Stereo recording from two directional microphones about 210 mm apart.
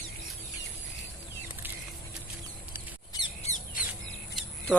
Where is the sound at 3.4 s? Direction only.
35° left (ahead or behind).